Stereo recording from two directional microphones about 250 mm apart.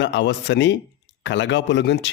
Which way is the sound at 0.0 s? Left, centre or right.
Left.